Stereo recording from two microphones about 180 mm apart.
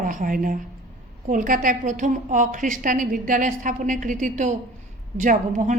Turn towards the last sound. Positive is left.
turn(degrees=-45)  # may be behind; listen again after turning